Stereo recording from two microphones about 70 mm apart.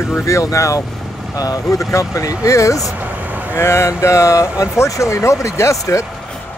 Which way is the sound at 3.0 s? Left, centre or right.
Right.